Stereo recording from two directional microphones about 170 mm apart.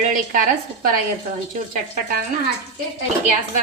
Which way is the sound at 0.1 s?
50° right (ahead or behind).